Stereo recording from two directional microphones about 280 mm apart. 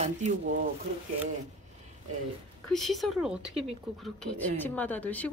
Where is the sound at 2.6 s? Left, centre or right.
Centre.